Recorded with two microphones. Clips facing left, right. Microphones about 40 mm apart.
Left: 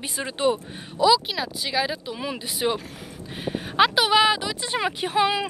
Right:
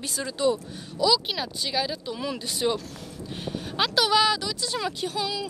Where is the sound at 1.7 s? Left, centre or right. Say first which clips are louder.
Left 3 dB; centre; by 5.5 s left.